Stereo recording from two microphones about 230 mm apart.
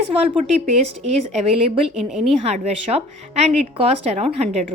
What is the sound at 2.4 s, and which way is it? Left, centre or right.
Speech, right.